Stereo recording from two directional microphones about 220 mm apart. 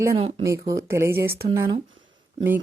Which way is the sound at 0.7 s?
15° right (ahead or behind).